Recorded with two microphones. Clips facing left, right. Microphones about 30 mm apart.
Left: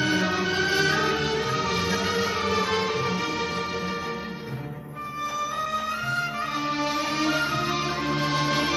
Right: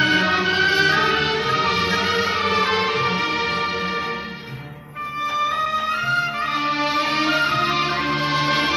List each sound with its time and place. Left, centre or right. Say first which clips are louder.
0.0 s music: right 6 dB; right
5.3 s music: right 7 dB; right